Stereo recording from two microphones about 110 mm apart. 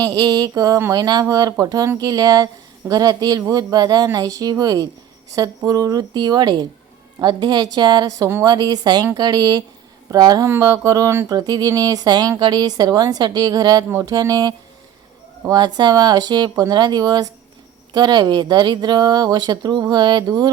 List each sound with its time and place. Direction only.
0.0 s speech: 35° right (ahead or behind)